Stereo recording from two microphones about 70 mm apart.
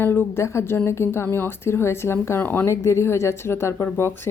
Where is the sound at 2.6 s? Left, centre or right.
Left.